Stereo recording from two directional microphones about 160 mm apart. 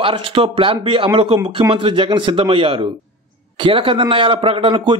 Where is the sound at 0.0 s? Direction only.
30° right (ahead or behind).